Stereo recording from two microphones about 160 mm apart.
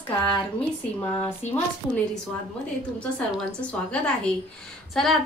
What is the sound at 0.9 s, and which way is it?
Speech, 10° left (ahead or behind).